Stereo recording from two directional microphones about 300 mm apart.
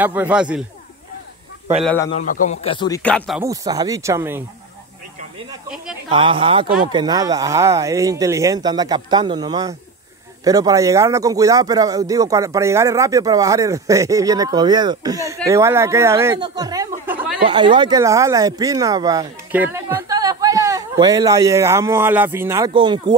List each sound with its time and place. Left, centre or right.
0.0 s speech: centre
1.8 s speech: centre
2.1 s a man's voice: left
3.0 s speech: centre
3.3 s speech: centre
5.5 s speech: centre
6.0 s speech: centre